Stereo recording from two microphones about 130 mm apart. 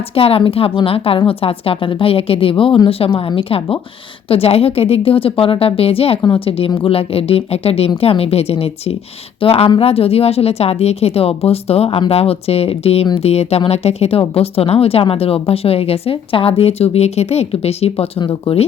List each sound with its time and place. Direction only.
0.1 s speech: 45° left (ahead or behind)
18.2 s speech: 35° left (ahead or behind)